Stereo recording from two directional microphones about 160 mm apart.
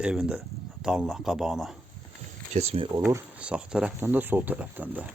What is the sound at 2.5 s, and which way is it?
Speech, 40° right (ahead or behind).